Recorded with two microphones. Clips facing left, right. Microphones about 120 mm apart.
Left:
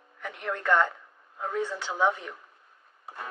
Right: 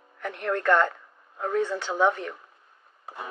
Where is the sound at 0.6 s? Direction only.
10° left (ahead or behind).